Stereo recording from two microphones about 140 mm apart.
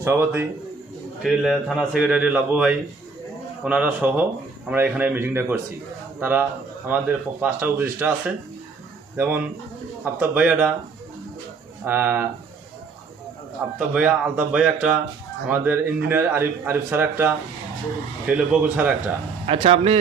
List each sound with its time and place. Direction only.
0.0 s a man's voice: 15° right (ahead or behind)
1.2 s a man's voice: centre (ahead or behind)
9.1 s a man's voice: 15° right (ahead or behind)
11.9 s a man's voice: 15° right (ahead or behind)
13.7 s a man's voice: 10° right (ahead or behind)
18.3 s a man's voice: 10° right (ahead or behind)
19.5 s speech: 45° right (ahead or behind)